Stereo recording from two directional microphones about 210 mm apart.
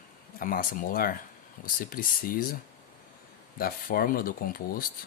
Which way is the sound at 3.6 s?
45° left (ahead or behind).